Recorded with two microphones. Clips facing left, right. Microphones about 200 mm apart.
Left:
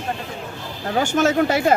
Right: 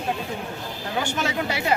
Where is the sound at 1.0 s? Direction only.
45° left (ahead or behind).